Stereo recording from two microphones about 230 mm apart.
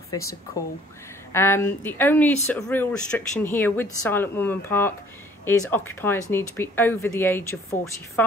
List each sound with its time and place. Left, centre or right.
0.1 s speech: centre
1.3 s speech: centre